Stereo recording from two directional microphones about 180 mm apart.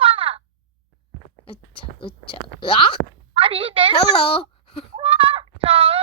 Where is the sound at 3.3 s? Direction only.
30° right (ahead or behind).